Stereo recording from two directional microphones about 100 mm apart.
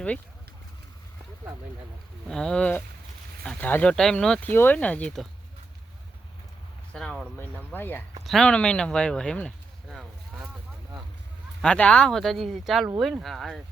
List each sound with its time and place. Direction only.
2.2 s speech: 5° left (ahead or behind)
3.9 s speech: 5° left (ahead or behind)
4.5 s speech: 20° left (ahead or behind)
6.9 s speech: 5° left (ahead or behind)
7.3 s speech: 20° left (ahead or behind)
8.2 s speech: centre (ahead or behind)
9.9 s a sound: 5° right (ahead or behind)
11.6 s speech: 10° left (ahead or behind)